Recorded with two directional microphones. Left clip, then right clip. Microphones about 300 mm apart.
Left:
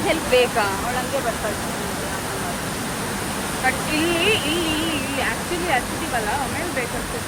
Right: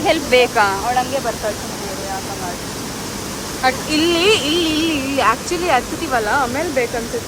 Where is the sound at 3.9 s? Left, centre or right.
Centre.